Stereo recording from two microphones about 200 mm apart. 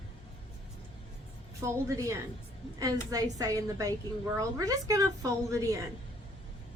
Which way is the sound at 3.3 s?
15° right (ahead or behind).